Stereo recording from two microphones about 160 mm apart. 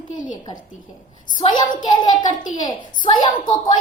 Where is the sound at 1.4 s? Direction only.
25° left (ahead or behind).